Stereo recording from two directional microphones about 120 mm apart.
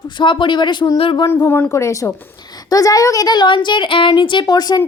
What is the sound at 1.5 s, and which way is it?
A woman's voice, 20° left (ahead or behind).